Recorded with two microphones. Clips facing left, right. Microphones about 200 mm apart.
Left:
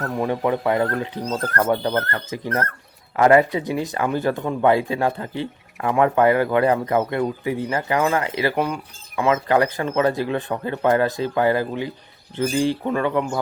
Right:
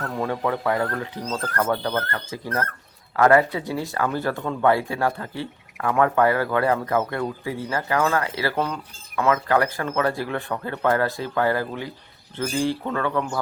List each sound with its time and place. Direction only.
0.0 s speech: 20° left (ahead or behind)